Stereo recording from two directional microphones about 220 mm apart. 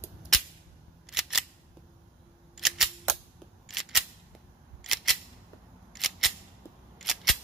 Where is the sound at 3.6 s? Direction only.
Centre (ahead or behind).